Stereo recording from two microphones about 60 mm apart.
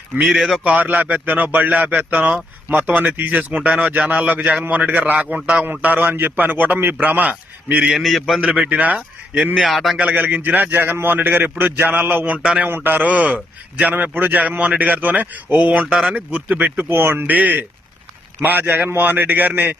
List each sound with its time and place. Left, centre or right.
0.3 s a man's voice: centre
0.6 s speech: right
7.9 s a man's voice: centre
8.4 s speech: centre
8.6 s speech: right
9.6 s a man's voice: centre
10.0 s a man's voice: right
12.6 s speech: right
15.9 s speech: centre
16.1 s speech: right
17.0 s a man's voice: right
17.2 s a man's voice: right